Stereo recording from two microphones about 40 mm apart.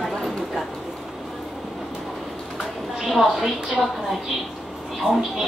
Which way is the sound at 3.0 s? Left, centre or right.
Centre.